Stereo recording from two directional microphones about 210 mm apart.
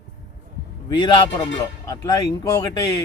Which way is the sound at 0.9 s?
20° left (ahead or behind).